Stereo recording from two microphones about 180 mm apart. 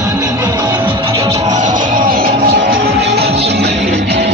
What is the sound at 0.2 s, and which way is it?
Music, 20° right (ahead or behind).